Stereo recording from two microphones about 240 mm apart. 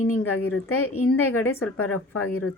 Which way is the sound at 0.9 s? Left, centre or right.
Left.